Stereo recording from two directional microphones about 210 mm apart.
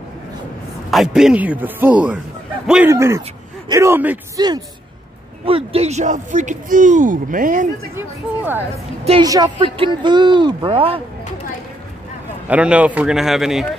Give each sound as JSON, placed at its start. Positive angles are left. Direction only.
{"t": 0.8, "sound": "a man's voice", "side_deg": 0}
{"t": 5.4, "sound": "speech", "side_deg": -25}
{"t": 9.0, "sound": "speech", "side_deg": -25}
{"t": 12.4, "sound": "a man's voice", "side_deg": -5}